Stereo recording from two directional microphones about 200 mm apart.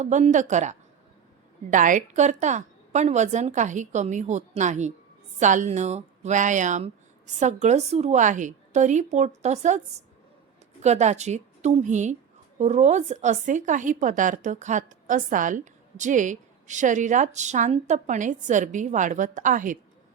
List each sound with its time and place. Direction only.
0.0 s a woman's voice: 35° right (ahead or behind)